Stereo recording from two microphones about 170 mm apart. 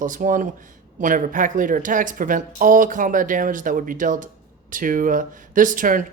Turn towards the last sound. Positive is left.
turn(degrees=-50)  # may be behind; listen again after turning